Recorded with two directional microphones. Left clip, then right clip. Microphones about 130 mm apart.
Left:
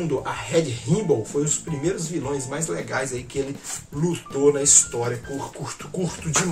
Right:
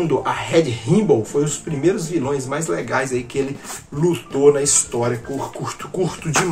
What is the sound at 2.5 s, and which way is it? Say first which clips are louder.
Speech: right 6 dB; 25° left (ahead or behind).